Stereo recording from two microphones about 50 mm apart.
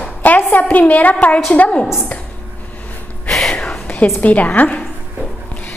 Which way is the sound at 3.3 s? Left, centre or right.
Centre.